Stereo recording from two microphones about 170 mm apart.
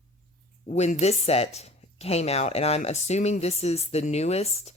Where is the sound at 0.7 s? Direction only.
40° left (ahead or behind).